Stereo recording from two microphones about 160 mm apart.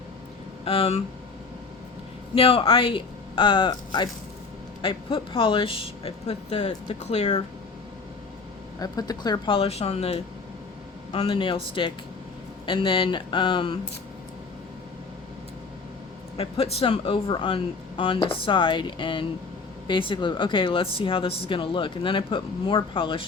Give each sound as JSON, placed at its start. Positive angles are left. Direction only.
{"t": 0.6, "sound": "speech", "side_deg": 35}
{"t": 2.3, "sound": "speech", "side_deg": 35}
{"t": 8.8, "sound": "speech", "side_deg": 25}
{"t": 16.4, "sound": "speech", "side_deg": 40}